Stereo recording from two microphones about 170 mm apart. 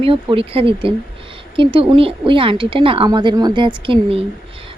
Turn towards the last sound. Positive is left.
turn(degrees=-30)  # may be behind; listen again after turning